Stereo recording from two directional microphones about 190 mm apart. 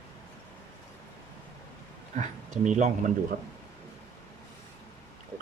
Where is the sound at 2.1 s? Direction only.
40° right (ahead or behind).